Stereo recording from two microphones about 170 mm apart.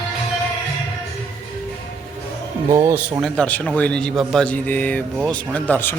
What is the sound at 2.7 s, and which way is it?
Music, 15° right (ahead or behind).